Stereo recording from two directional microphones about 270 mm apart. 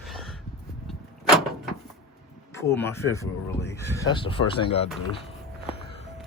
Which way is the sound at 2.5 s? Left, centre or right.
Centre.